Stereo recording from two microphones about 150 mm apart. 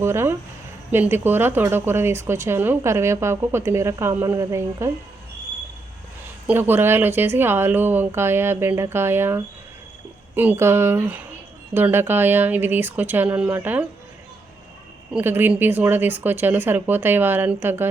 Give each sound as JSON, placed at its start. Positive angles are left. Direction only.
{"t": 0.0, "sound": "a woman's voice", "side_deg": -15}
{"t": 6.5, "sound": "a woman's voice", "side_deg": -15}
{"t": 15.1, "sound": "a woman's voice", "side_deg": -15}